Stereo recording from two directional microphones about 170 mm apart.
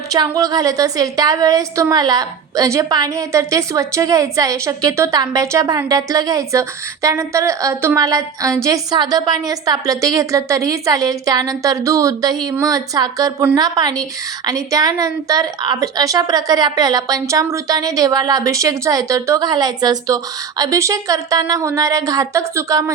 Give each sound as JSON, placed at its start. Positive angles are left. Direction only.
{"t": 0.1, "sound": "a woman's voice", "side_deg": -20}